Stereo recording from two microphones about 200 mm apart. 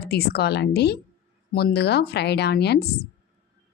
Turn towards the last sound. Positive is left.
turn(degrees=55)  # may be behind; listen again after turning